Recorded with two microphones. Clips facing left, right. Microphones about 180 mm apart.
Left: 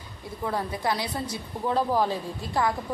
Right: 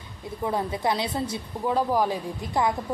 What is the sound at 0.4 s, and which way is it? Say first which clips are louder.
Speech: right 2 dB; 20° right (ahead or behind).